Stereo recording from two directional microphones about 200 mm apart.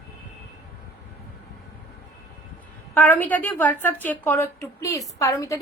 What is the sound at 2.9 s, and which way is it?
A woman's voice, 10° left (ahead or behind).